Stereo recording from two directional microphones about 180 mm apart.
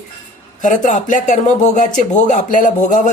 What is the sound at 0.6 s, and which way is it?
Speech, 45° left (ahead or behind).